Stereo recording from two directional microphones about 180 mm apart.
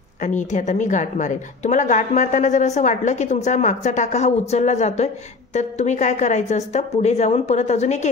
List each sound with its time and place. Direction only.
0.2 s a woman's voice: 40° left (ahead or behind)